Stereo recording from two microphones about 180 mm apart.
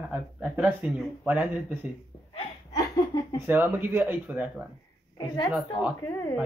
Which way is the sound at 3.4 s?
10° right (ahead or behind).